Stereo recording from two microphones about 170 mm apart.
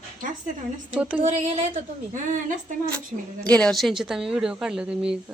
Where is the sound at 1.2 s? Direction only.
45° right (ahead or behind).